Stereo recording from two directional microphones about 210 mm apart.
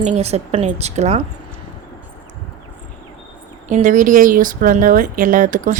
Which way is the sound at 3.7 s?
35° right (ahead or behind).